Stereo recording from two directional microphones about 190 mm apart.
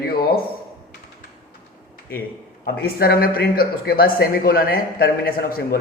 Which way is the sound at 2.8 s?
50° left (ahead or behind).